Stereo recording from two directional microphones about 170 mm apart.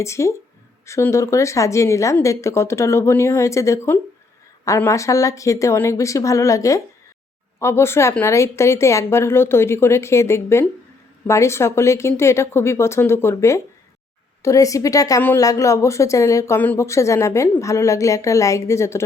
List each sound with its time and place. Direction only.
0.0 s a woman's voice: 15° left (ahead or behind)